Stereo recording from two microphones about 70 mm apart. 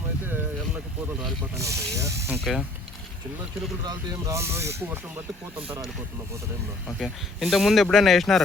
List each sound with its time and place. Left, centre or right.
1.5 s speech: right
2.4 s speech: centre
4.3 s speech: right
6.8 s speech: centre